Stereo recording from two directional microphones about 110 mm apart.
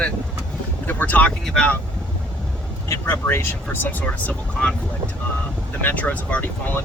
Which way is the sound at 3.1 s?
25° left (ahead or behind).